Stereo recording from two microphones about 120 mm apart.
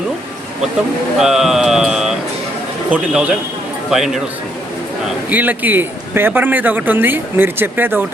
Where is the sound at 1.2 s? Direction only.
5° right (ahead or behind).